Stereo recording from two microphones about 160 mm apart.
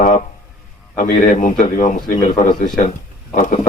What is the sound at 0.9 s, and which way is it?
A man's voice, 55° left (ahead or behind).